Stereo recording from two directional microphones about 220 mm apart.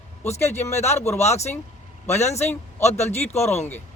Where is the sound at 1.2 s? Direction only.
30° left (ahead or behind).